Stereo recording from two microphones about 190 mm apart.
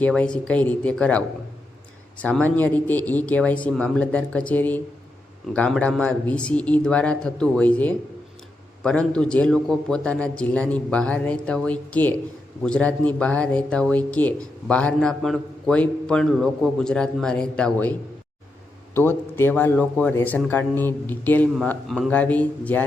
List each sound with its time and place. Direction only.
0.0 s speech: 5° left (ahead or behind)
18.9 s speech: 10° left (ahead or behind)